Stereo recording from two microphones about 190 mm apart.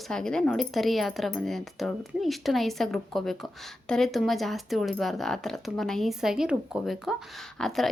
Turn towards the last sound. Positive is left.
turn(degrees=0)  # may be behind; listen again after turning